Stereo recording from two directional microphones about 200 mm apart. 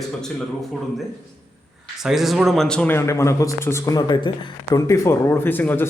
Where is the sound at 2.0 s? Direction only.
Centre (ahead or behind).